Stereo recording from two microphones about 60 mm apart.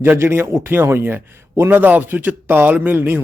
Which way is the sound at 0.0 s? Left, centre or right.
Right.